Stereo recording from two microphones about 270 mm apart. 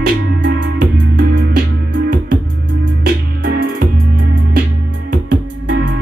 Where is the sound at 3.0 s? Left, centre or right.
Right.